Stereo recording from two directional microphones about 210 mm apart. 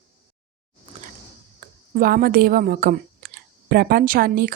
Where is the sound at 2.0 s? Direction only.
45° right (ahead or behind).